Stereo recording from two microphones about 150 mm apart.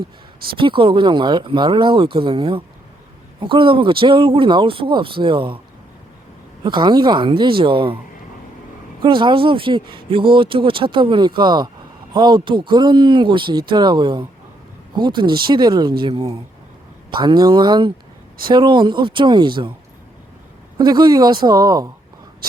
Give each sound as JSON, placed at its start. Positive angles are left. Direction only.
{"t": 0.5, "sound": "speech", "side_deg": -35}
{"t": 6.6, "sound": "speech", "side_deg": -30}
{"t": 9.0, "sound": "speech", "side_deg": -30}
{"t": 20.7, "sound": "speech", "side_deg": -30}